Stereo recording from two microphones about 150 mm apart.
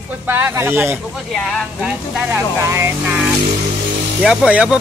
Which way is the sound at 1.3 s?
Centre (ahead or behind).